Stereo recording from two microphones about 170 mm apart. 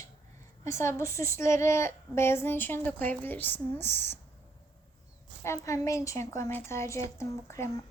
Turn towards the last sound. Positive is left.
turn(degrees=15)  # may be behind; listen again after turning